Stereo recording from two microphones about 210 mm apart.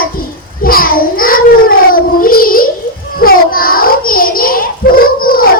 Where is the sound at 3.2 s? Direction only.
45° left (ahead or behind).